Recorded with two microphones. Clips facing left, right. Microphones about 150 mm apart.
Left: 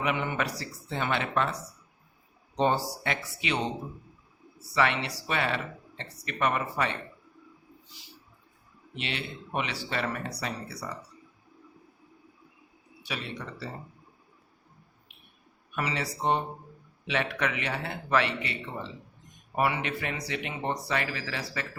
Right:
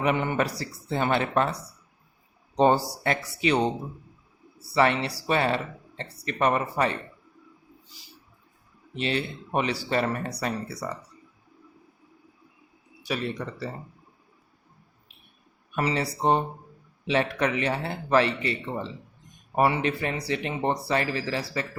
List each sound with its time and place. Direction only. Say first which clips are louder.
0.0 s speech: right 5 dB; 40° right (ahead or behind)
2.6 s speech: right 5 dB; 40° right (ahead or behind)
4.7 s speech: right 4 dB; 35° right (ahead or behind)
9.0 s speech: right 8 dB; 40° right (ahead or behind)
13.0 s speech: right 7 dB; 45° right (ahead or behind)
15.7 s speech: right 5 dB; 35° right (ahead or behind)